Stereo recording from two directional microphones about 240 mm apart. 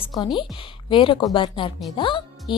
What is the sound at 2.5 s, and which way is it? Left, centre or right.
Music, centre.